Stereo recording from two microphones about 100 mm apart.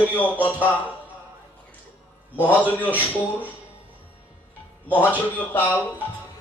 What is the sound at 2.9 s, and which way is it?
Speech, 15° right (ahead or behind).